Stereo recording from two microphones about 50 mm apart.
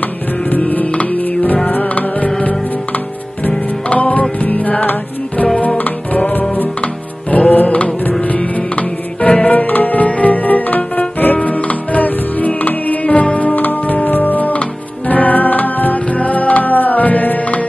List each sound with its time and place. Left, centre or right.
0.5 s music: left
3.4 s music: left